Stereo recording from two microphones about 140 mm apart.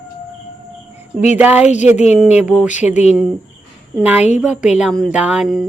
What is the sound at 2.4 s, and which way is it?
Speech, 5° right (ahead or behind).